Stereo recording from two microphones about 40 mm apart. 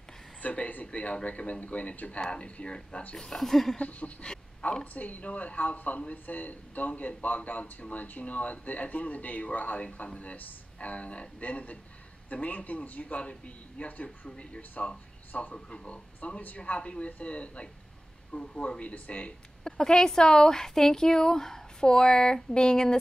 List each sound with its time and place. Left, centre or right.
0.4 s speech: left
3.2 s speech: centre
3.7 s speech: left
4.2 s a sound: left
4.9 s speech: left
14.3 s speech: left
19.6 s speech: centre